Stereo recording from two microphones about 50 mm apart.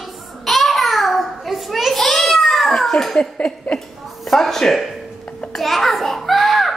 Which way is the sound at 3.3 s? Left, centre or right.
Left.